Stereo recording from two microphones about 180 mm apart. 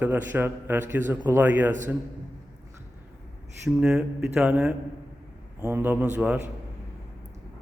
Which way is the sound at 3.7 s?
5° right (ahead or behind).